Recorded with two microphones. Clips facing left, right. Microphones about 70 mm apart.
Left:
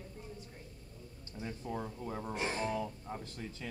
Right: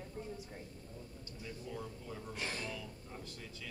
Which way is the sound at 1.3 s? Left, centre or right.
Left.